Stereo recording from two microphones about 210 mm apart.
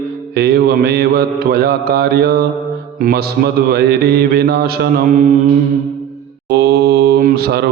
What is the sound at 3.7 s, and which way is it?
Speech, 50° right (ahead or behind).